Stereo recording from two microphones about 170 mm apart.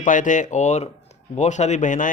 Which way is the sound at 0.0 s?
50° left (ahead or behind).